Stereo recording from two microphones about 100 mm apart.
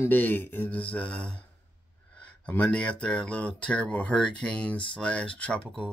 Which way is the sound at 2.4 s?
10° left (ahead or behind).